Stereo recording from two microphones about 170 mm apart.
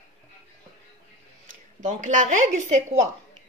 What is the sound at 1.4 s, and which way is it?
Speech, 50° right (ahead or behind).